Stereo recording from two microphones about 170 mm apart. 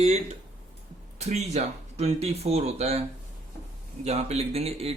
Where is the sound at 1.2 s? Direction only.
40° right (ahead or behind).